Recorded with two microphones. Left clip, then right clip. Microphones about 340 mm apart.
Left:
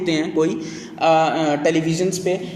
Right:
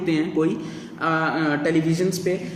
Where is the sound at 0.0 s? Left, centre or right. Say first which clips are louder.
Left 3 dB; centre.